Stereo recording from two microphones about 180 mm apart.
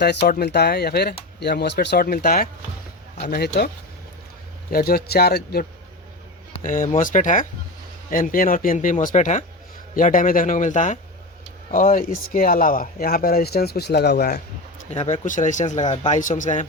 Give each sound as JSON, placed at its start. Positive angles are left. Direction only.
{"t": 0.0, "sound": "speech", "side_deg": 65}
{"t": 4.7, "sound": "speech", "side_deg": 55}
{"t": 6.6, "sound": "a man's voice", "side_deg": 45}
{"t": 14.8, "sound": "a man's voice", "side_deg": 40}